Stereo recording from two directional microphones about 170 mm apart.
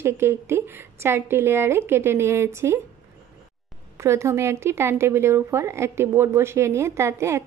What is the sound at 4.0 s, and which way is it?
Speech, 15° right (ahead or behind).